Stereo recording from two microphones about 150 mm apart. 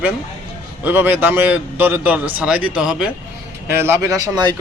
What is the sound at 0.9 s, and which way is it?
A man's voice, 10° right (ahead or behind).